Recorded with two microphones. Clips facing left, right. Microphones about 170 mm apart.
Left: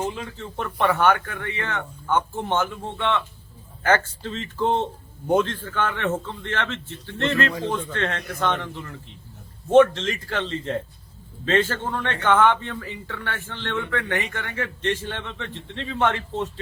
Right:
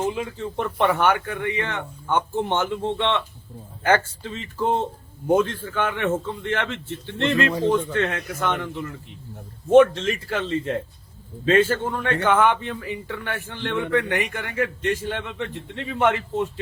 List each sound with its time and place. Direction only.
0.0 s a man's voice: 15° right (ahead or behind)
3.8 s a man's voice: 10° right (ahead or behind)
7.9 s a man's voice: 10° right (ahead or behind)
9.7 s a man's voice: 10° right (ahead or behind)
11.4 s a man's voice: 10° right (ahead or behind)